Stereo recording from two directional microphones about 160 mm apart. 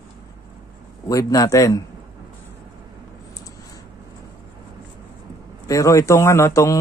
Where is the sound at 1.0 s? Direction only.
20° left (ahead or behind).